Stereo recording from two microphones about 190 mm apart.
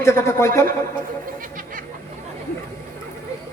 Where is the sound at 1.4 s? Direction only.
45° right (ahead or behind).